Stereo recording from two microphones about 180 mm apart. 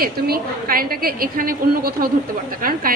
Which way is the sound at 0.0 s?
55° right (ahead or behind).